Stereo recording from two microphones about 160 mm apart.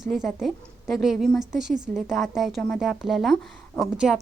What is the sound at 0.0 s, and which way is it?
A woman's voice, centre (ahead or behind).